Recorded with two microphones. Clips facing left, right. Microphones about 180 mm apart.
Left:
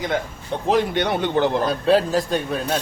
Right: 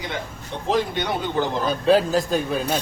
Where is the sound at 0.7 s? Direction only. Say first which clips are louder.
Left 3 dB; 65° left (ahead or behind).